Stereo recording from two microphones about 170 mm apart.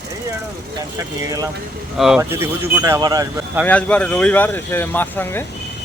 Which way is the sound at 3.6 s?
10° left (ahead or behind).